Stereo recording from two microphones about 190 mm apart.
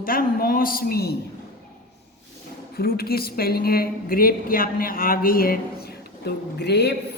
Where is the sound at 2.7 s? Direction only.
55° left (ahead or behind).